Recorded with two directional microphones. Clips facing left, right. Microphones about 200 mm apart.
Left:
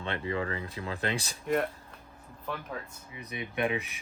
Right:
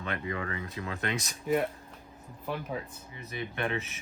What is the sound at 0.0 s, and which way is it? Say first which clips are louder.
Speech: left 2 dB; 30° left (ahead or behind).